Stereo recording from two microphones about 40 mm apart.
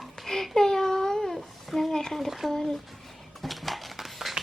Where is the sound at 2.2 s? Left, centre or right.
Centre.